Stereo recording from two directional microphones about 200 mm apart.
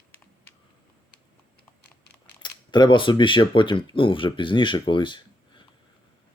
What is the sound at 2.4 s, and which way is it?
Speech, 20° left (ahead or behind).